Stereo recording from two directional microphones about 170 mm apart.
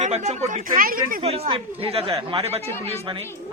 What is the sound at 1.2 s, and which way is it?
Speech, 35° right (ahead or behind).